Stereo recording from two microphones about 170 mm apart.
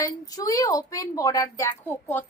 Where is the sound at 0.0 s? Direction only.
20° left (ahead or behind).